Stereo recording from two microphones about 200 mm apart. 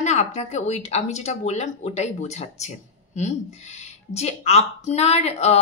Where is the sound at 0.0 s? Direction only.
35° left (ahead or behind).